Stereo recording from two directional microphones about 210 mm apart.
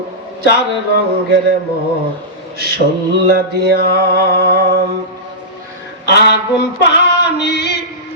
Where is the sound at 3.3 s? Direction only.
45° right (ahead or behind).